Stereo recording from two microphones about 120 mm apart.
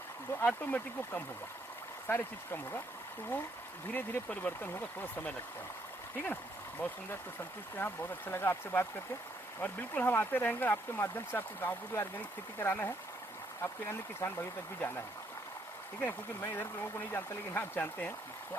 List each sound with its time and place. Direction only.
0.3 s speech: 15° left (ahead or behind)
3.9 s speech: 15° left (ahead or behind)
14.2 s speech: 20° left (ahead or behind)
16.0 s speech: 15° left (ahead or behind)